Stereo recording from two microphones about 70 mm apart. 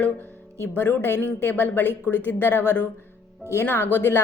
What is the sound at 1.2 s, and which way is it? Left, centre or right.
A woman's voice, left.